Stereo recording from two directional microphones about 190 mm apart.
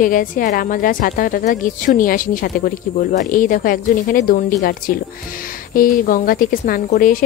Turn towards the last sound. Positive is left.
turn(degrees=45)  # may be behind; listen again after turning